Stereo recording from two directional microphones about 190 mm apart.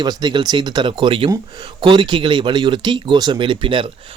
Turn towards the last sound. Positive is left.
turn(degrees=-25)  # may be behind; listen again after turning